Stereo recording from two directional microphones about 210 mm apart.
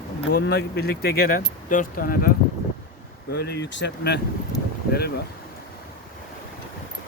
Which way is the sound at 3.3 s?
55° left (ahead or behind).